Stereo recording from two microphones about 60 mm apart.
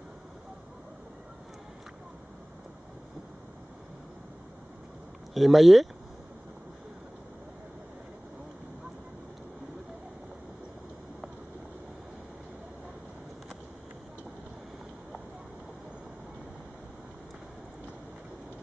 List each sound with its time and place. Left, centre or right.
5.3 s speech: centre